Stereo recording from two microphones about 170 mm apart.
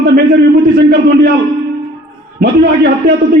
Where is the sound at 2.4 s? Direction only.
75° right (ahead or behind).